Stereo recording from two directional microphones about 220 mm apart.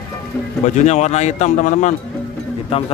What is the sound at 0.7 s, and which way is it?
Speech, 30° left (ahead or behind).